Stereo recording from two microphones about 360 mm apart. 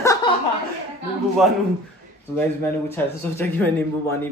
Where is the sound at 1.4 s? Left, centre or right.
Centre.